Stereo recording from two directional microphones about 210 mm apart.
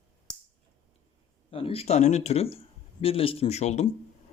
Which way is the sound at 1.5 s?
25° left (ahead or behind).